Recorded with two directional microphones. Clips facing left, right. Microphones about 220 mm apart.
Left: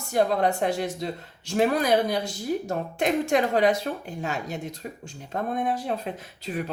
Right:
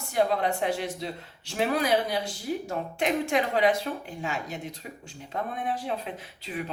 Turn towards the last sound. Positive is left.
turn(degrees=45)  # may be behind; listen again after turning